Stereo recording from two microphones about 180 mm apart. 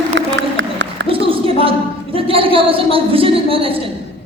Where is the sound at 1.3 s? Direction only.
30° right (ahead or behind).